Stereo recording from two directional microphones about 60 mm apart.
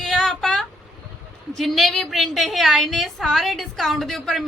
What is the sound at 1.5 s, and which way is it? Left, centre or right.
A woman's voice, centre.